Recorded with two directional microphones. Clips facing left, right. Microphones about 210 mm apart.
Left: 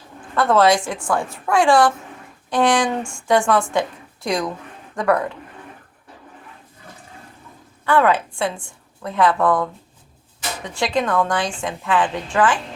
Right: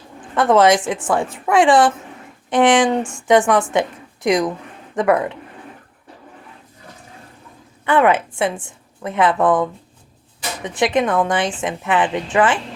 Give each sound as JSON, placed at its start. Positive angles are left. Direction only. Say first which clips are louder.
{"t": 0.3, "sound": "a woman's voice", "louder": "right 2 dB", "side_deg": -20}
{"t": 7.9, "sound": "a woman's voice", "louder": "right 2 dB", "side_deg": -20}